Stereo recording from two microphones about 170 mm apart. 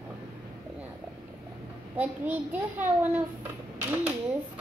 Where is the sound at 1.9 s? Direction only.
10° right (ahead or behind).